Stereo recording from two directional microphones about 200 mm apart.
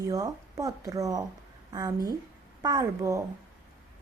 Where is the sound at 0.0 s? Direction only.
15° right (ahead or behind).